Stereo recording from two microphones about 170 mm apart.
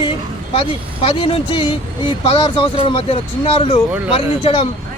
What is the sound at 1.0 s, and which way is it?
A man's voice, 35° left (ahead or behind).